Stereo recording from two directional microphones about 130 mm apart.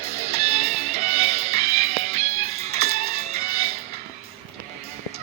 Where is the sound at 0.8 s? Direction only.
55° right (ahead or behind).